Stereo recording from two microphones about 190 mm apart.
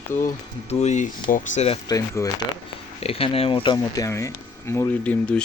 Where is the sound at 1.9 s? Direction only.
15° left (ahead or behind).